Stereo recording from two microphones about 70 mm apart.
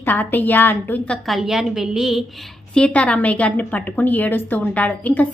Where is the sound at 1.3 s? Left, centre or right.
Centre.